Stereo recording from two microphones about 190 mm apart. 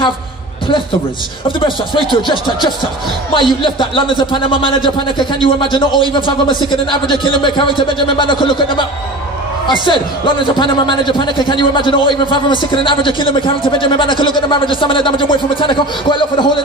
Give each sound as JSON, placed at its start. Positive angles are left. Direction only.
{"t": 1.6, "sound": "a man's voice", "side_deg": 25}